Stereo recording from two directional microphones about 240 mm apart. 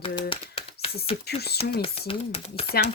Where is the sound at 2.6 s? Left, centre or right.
Left.